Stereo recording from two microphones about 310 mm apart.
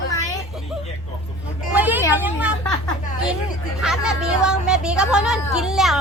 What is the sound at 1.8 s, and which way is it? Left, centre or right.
Speech, centre.